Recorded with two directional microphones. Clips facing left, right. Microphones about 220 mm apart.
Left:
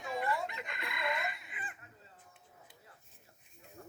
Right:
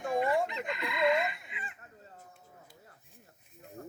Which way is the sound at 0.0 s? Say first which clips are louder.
Right 7 dB; 50° right (ahead or behind).